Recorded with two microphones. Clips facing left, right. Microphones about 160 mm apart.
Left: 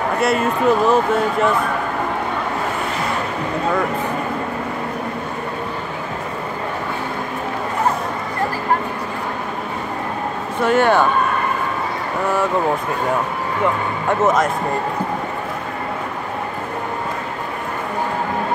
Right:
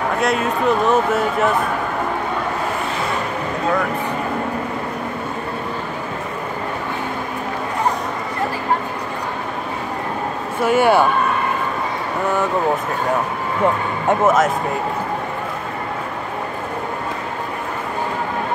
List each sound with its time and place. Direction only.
0.2 s speech: centre (ahead or behind)
10.6 s speech: 10° right (ahead or behind)